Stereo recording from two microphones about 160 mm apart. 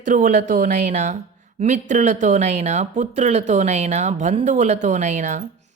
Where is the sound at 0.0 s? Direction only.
55° right (ahead or behind).